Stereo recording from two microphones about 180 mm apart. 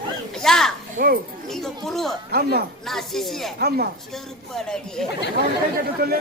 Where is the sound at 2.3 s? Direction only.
60° right (ahead or behind).